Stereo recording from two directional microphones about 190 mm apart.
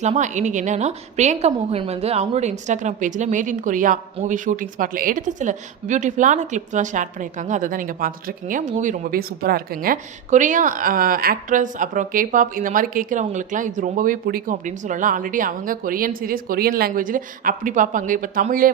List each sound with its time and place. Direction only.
0.0 s a woman's voice: 40° right (ahead or behind)